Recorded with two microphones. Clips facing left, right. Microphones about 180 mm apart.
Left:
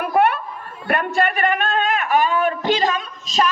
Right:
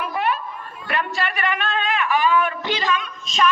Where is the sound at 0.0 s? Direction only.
55° left (ahead or behind).